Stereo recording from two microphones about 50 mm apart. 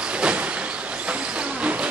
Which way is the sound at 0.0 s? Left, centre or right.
Right.